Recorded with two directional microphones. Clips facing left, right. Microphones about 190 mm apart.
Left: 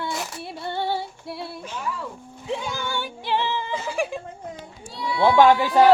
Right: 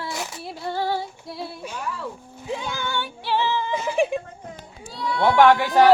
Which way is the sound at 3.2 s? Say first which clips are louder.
Right 2 dB; 55° left (ahead or behind).